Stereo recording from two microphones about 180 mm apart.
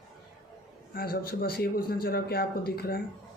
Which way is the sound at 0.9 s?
55° left (ahead or behind).